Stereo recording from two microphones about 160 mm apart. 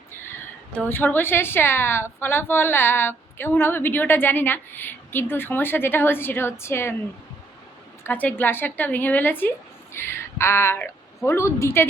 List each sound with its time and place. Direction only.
0.9 s a woman's voice: 15° left (ahead or behind)
8.0 s a woman's voice: 10° left (ahead or behind)